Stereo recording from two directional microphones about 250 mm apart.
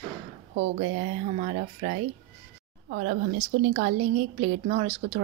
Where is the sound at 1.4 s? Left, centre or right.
Right.